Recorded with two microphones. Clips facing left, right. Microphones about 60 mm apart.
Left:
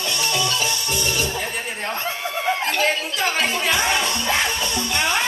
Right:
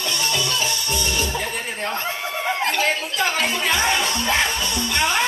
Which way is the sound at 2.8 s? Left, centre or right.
Right.